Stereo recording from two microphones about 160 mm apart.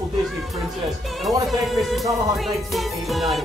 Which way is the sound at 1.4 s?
Centre (ahead or behind).